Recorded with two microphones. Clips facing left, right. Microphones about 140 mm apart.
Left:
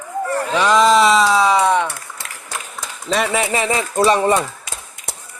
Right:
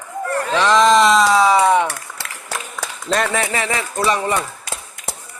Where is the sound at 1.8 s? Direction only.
70° right (ahead or behind).